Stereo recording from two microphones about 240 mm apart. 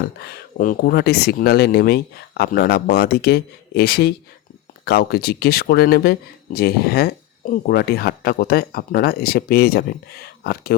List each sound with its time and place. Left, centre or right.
0.2 s speech: left